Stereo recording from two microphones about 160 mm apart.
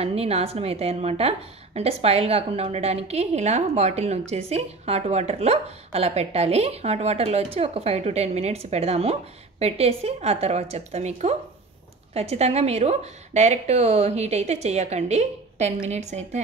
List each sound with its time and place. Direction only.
0.0 s a woman's voice: 40° right (ahead or behind)